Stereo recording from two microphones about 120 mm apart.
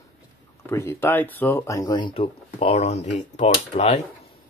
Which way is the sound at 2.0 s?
45° left (ahead or behind).